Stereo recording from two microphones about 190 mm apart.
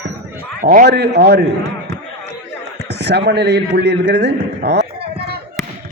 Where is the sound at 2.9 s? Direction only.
60° right (ahead or behind).